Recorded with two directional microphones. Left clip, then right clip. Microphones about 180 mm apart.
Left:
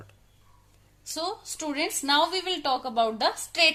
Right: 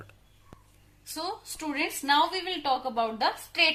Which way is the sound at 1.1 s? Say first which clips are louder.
Left 3 dB; 55° left (ahead or behind).